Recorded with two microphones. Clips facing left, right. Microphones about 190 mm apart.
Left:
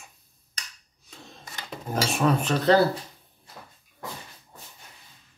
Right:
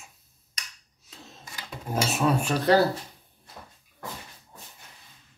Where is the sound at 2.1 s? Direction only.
5° right (ahead or behind).